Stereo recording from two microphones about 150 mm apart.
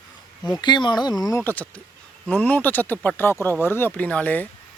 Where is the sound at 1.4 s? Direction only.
10° left (ahead or behind).